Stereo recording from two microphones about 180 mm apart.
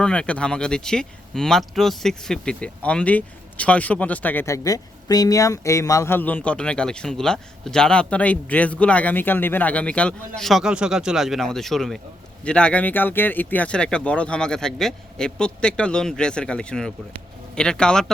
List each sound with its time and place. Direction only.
0.0 s speech: 5° left (ahead or behind)